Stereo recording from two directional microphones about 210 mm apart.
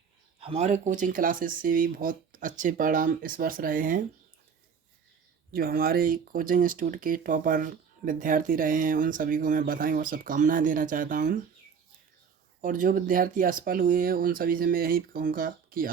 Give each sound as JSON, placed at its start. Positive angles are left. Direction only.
{"t": 0.3, "sound": "speech", "side_deg": -30}
{"t": 5.5, "sound": "speech", "side_deg": -45}
{"t": 12.6, "sound": "speech", "side_deg": -40}